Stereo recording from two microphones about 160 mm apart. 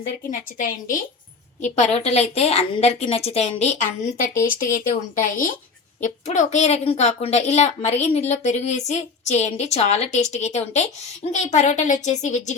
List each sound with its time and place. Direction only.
0.3 s speech: 55° left (ahead or behind)
1.6 s a woman's voice: 45° left (ahead or behind)